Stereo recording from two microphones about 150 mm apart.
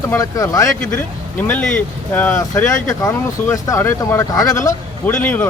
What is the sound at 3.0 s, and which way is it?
Speech, 20° left (ahead or behind).